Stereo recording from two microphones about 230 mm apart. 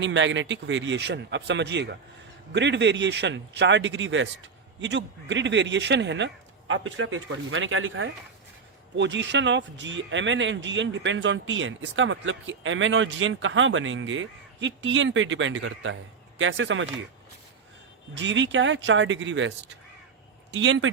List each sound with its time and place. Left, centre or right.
0.0 s speech: right
18.1 s speech: right